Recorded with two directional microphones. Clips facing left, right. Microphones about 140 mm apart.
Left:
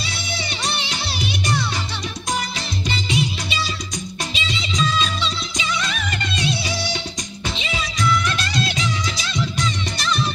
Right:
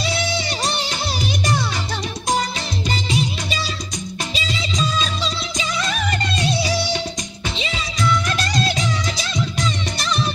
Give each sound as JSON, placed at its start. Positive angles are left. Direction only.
{"t": 0.5, "sound": "music", "side_deg": -40}
{"t": 4.3, "sound": "music", "side_deg": -40}
{"t": 8.5, "sound": "music", "side_deg": -40}